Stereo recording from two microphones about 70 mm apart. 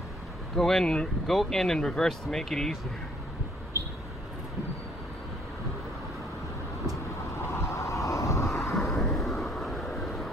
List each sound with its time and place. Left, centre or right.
0.6 s speech: centre
7.3 s vehicle: left
8.7 s vehicle: centre